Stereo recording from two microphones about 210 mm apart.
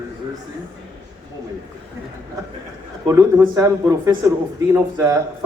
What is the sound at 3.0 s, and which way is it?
Speech, 15° right (ahead or behind).